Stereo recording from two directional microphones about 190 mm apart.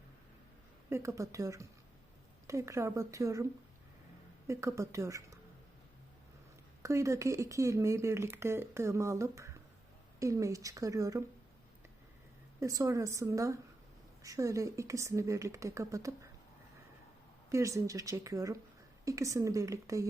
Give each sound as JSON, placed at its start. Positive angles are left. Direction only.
{"t": 0.9, "sound": "speech", "side_deg": -15}
{"t": 4.4, "sound": "speech", "side_deg": -15}
{"t": 6.8, "sound": "speech", "side_deg": -15}
{"t": 12.5, "sound": "speech", "side_deg": -15}
{"t": 17.5, "sound": "speech", "side_deg": -15}